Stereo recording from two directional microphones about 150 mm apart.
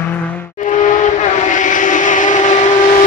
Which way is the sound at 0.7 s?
55° left (ahead or behind).